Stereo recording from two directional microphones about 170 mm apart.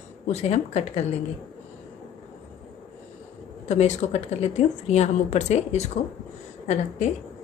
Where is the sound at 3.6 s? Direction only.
40° left (ahead or behind).